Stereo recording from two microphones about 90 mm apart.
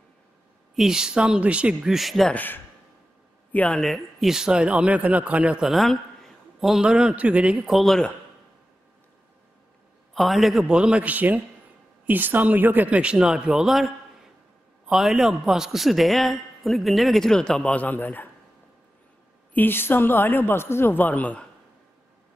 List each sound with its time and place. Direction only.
0.7 s a man's voice: 5° right (ahead or behind)
2.3 s speech: 20° left (ahead or behind)
3.8 s a man's voice: centre (ahead or behind)
5.7 s a man's voice: centre (ahead or behind)
7.6 s a man's voice: centre (ahead or behind)
10.1 s a man's voice: centre (ahead or behind); by 18.3 s 20° left (ahead or behind)
19.5 s speech: 25° left (ahead or behind)